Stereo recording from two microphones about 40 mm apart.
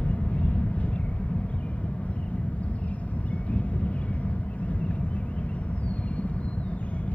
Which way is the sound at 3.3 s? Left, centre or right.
Left.